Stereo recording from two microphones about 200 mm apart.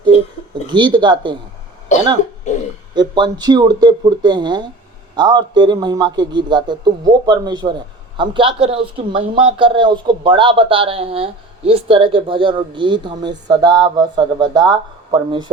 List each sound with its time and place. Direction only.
0.7 s speech: 25° right (ahead or behind)
2.9 s speech: 20° right (ahead or behind)